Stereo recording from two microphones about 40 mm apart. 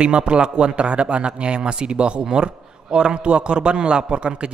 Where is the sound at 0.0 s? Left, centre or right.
Right.